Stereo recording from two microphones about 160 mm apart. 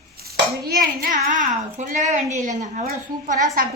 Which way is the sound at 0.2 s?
75° right (ahead or behind).